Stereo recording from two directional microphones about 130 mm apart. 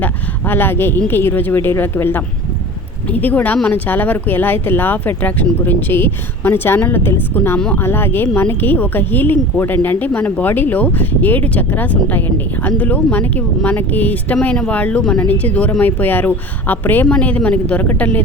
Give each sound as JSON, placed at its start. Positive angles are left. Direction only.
{"t": 0.0, "sound": "speech", "side_deg": 15}